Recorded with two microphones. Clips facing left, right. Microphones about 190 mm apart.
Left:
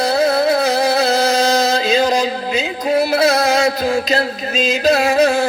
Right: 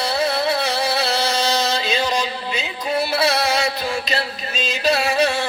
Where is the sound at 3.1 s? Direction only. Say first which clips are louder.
Left 5 dB; 45° left (ahead or behind).